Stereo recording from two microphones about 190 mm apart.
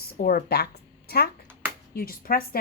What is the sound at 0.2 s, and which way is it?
Speech, 50° left (ahead or behind).